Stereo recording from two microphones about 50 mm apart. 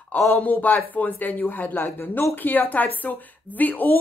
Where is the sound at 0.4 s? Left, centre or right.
Left.